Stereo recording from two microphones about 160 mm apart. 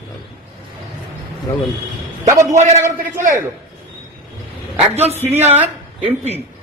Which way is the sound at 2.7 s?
15° right (ahead or behind).